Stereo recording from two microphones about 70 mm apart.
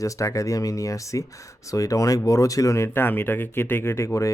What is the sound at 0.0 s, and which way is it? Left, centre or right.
Speech, left.